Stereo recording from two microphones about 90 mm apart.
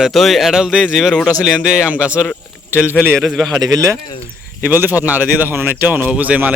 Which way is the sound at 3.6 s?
45° right (ahead or behind).